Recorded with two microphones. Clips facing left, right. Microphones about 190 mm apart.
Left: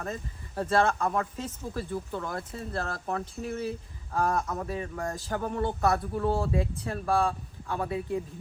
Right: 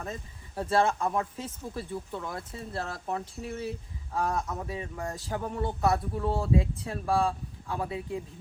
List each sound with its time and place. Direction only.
0.0 s speech: 10° right (ahead or behind)
0.9 s speech: 15° right (ahead or behind)
1.9 s speech: centre (ahead or behind)